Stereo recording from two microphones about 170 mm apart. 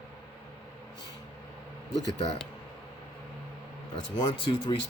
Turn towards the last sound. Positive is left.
turn(degrees=25)  # may be behind; listen again after turning